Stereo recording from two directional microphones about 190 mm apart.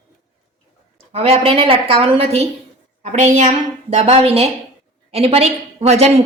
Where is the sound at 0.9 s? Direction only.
30° right (ahead or behind).